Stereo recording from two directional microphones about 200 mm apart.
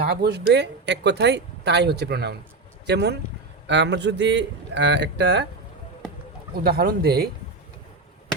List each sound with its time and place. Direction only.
0.0 s speech: 55° right (ahead or behind)
6.5 s speech: 50° right (ahead or behind)